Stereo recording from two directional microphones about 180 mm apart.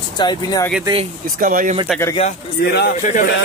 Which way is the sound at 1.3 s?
50° right (ahead or behind).